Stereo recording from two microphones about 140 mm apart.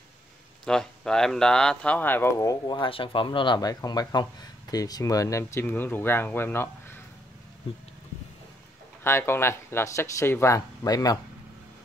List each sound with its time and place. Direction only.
0.7 s speech: 5° left (ahead or behind)
9.0 s speech: 15° left (ahead or behind)